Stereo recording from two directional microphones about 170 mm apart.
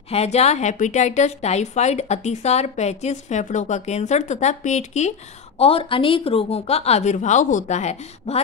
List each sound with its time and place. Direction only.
0.1 s a woman's voice: 40° left (ahead or behind)